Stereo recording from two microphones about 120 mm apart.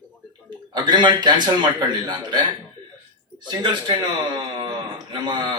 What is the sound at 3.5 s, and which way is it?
Speech, 35° right (ahead or behind).